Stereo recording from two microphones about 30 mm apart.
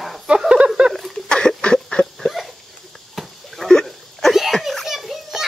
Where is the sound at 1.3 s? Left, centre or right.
Left.